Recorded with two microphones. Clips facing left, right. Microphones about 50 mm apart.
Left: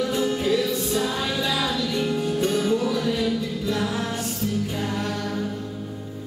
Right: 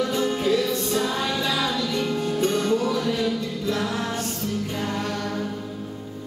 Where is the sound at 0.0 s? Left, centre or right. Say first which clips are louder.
Even; centre.